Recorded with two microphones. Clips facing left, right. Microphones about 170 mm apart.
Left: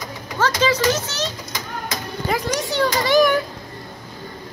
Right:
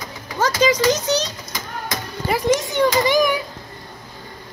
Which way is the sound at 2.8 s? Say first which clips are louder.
Left 3 dB; 15° right (ahead or behind).